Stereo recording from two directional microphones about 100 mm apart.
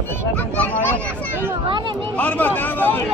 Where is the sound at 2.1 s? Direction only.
15° left (ahead or behind).